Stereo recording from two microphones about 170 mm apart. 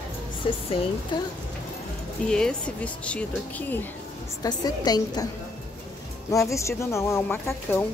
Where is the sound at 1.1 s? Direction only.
25° left (ahead or behind).